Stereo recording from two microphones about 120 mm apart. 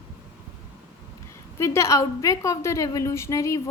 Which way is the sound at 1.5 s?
25° left (ahead or behind).